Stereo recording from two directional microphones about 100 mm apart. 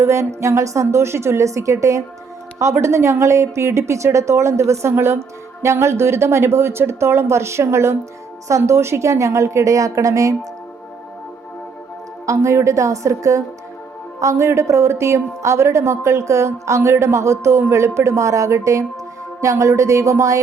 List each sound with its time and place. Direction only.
0.0 s a woman's voice: 30° right (ahead or behind)
12.2 s a woman's voice: 30° right (ahead or behind)